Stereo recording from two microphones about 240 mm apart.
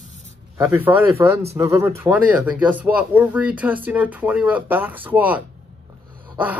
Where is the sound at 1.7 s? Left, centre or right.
Centre.